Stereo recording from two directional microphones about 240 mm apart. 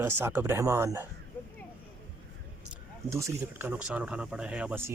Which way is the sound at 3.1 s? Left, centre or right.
Centre.